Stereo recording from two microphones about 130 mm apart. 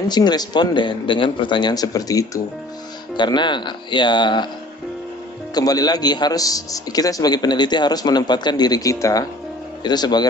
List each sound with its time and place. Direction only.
0.1 s a man's voice: 30° left (ahead or behind)
5.5 s a man's voice: 30° left (ahead or behind)